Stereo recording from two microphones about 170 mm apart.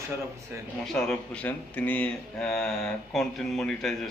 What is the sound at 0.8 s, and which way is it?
Speech, 5° left (ahead or behind).